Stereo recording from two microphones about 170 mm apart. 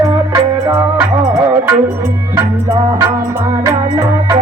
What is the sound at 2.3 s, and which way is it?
Music, 20° right (ahead or behind).